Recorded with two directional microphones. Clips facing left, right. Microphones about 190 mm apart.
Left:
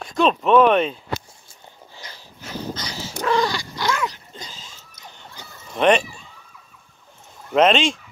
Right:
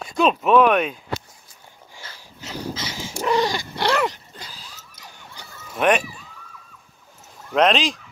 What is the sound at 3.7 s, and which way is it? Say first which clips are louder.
Dog: right 4 dB; 65° right (ahead or behind).